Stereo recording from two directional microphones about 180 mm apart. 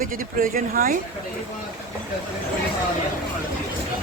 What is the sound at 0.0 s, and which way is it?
Speech, 50° right (ahead or behind).